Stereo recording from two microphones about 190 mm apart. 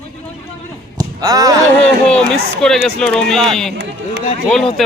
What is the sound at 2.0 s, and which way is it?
Speech, 5° left (ahead or behind).